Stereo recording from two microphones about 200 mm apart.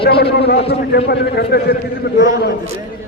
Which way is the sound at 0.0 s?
55° left (ahead or behind).